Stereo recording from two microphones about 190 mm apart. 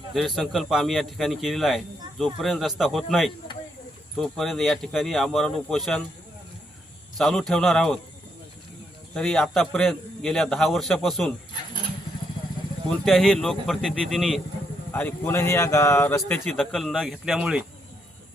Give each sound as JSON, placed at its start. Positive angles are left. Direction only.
{"t": 0.1, "sound": "a man's voice", "side_deg": 0}
{"t": 7.2, "sound": "a man's voice", "side_deg": 0}
{"t": 9.1, "sound": "a man's voice", "side_deg": 5}
{"t": 12.9, "sound": "a man's voice", "side_deg": 0}
{"t": 14.9, "sound": "speech", "side_deg": 10}